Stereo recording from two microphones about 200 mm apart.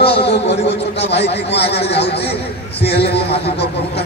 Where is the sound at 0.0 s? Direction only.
25° left (ahead or behind).